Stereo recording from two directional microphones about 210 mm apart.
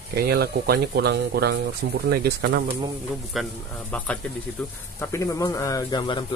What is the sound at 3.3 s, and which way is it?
Speech, centre (ahead or behind).